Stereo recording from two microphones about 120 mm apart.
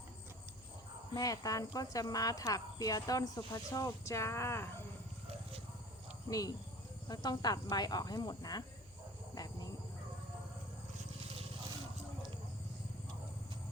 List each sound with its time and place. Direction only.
1.1 s speech: 30° left (ahead or behind)
6.3 s speech: 30° left (ahead or behind)
9.3 s a sound: 30° left (ahead or behind)